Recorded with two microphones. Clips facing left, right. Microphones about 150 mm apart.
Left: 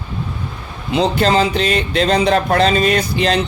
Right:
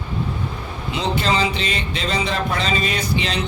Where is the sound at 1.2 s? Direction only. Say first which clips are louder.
Left 6 dB; 45° left (ahead or behind).